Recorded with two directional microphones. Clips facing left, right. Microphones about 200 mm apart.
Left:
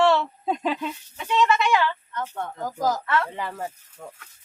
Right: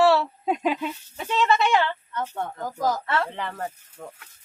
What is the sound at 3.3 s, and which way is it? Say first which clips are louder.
Speech: even; 5° left (ahead or behind).